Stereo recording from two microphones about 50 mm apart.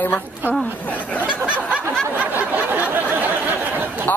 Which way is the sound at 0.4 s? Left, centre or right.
Right.